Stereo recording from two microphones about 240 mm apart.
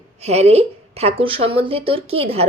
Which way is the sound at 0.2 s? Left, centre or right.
Right.